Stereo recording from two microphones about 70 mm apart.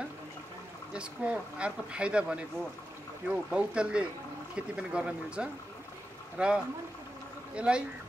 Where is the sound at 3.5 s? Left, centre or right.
Centre.